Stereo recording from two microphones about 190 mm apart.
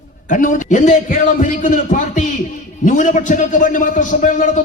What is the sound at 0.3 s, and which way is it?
A man's voice, 40° left (ahead or behind).